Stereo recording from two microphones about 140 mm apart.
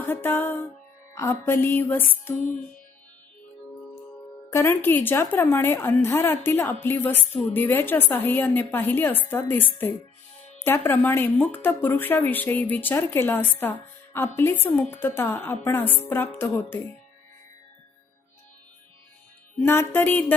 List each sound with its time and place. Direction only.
0.0 s music: 15° left (ahead or behind)
1.1 s a woman's voice: 20° left (ahead or behind)
4.4 s a woman's voice: 20° left (ahead or behind)
19.5 s a woman's voice: 15° left (ahead or behind)